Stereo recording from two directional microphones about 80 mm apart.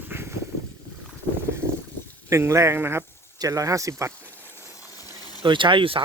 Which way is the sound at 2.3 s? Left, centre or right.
Right.